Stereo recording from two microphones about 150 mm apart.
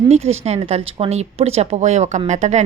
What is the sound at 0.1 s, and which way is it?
Speech, 45° right (ahead or behind).